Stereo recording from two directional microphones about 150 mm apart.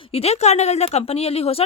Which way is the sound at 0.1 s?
45° left (ahead or behind).